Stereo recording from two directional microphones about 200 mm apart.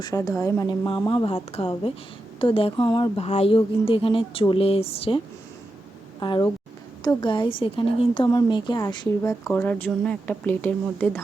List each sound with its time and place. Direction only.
0.0 s a woman's voice: 15° left (ahead or behind)
9.5 s speech: 10° left (ahead or behind)